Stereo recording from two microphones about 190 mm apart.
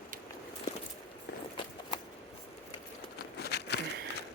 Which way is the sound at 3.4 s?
60° left (ahead or behind).